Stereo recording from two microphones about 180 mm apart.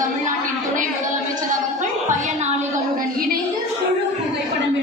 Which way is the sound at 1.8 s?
40° right (ahead or behind).